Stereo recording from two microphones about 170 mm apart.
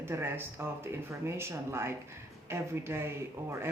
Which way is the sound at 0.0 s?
15° right (ahead or behind).